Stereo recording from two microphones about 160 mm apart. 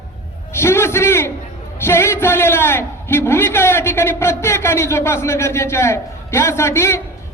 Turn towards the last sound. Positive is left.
turn(degrees=15)  # may be behind; listen again after turning